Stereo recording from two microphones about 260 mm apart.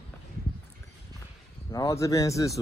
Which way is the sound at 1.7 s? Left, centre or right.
Centre.